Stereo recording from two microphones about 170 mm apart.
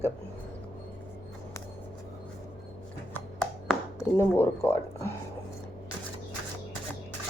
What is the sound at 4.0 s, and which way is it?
Speech, 15° left (ahead or behind).